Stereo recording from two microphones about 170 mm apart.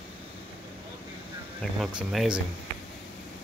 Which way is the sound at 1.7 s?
Centre (ahead or behind).